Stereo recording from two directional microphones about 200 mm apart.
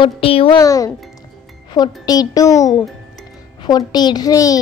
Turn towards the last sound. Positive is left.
turn(degrees=20)  # may be behind; listen again after turning